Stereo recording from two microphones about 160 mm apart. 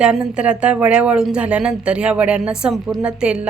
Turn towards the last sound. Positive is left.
turn(degrees=-5)  # may be behind; listen again after turning